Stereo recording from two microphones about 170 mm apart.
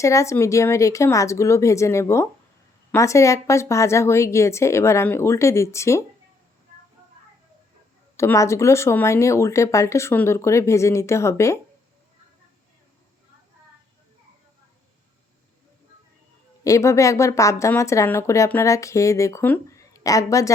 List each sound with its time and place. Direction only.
0.0 s a woman's voice: 15° left (ahead or behind)
8.1 s a woman's voice: 15° left (ahead or behind)
16.6 s a woman's voice: 20° left (ahead or behind)